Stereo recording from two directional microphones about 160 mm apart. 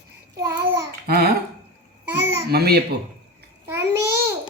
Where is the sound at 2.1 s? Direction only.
15° right (ahead or behind).